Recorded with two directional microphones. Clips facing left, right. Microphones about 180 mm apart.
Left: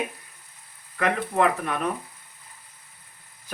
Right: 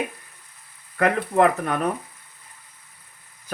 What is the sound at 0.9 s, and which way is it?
Speech, 50° right (ahead or behind).